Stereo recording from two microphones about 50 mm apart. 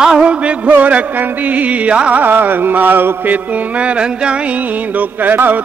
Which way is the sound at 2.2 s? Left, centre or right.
Right.